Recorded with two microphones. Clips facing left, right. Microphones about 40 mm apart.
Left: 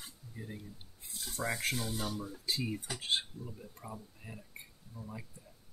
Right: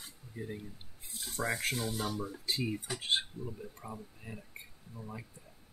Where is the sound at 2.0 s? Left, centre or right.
Centre.